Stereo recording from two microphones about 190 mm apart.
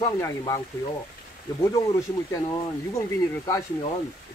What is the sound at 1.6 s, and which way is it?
Speech, 15° left (ahead or behind).